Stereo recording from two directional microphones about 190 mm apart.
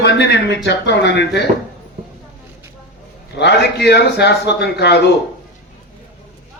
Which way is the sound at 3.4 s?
60° left (ahead or behind).